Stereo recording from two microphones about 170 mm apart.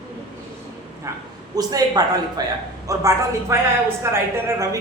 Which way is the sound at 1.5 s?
20° right (ahead or behind).